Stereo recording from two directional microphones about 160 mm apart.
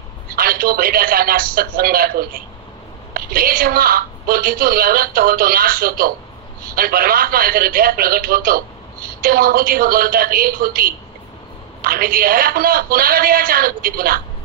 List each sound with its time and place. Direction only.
0.4 s a woman's voice: 65° right (ahead or behind)